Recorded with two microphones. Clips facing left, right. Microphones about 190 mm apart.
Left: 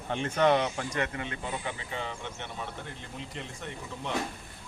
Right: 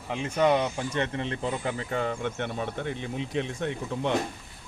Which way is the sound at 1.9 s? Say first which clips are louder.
Right 8 dB; 50° right (ahead or behind).